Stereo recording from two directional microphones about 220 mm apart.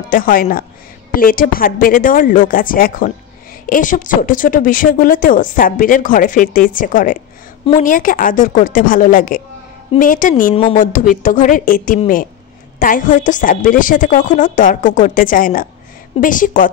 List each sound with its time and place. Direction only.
0.1 s speech: 40° left (ahead or behind)